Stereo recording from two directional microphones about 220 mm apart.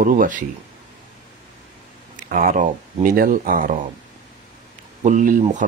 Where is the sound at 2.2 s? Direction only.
40° right (ahead or behind).